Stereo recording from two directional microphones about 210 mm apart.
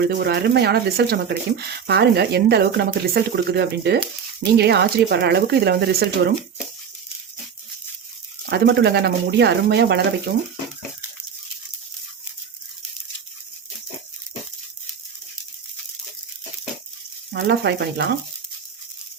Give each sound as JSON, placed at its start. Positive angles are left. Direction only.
{"t": 0.0, "sound": "speech", "side_deg": -50}
{"t": 8.4, "sound": "speech", "side_deg": -50}
{"t": 17.3, "sound": "speech", "side_deg": -50}